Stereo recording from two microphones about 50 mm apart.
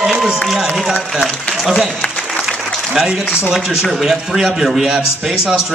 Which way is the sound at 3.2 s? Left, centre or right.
Left.